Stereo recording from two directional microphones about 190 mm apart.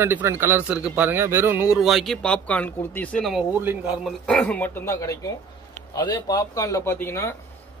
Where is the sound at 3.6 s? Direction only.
10° right (ahead or behind).